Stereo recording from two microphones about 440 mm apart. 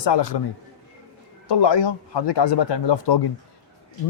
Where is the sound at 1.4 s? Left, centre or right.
Left.